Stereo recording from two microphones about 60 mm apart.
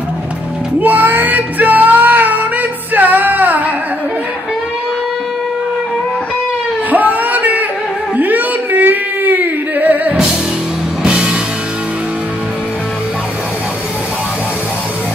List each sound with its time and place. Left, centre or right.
0.7 s music: right
6.9 s a sound: right
11.0 s music: centre